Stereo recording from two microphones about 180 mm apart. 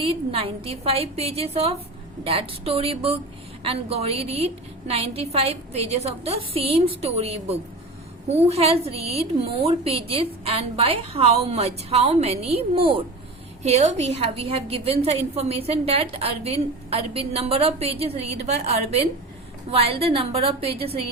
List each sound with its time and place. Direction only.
0.0 s a woman's voice: 30° right (ahead or behind)